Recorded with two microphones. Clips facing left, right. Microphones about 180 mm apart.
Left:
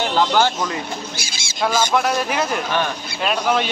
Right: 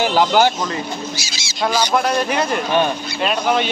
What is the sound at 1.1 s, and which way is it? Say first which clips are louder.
Bird: right 2 dB; 55° left (ahead or behind).